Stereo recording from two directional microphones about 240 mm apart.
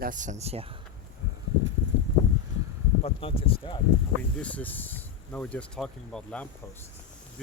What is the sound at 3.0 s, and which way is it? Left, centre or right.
Speech, left.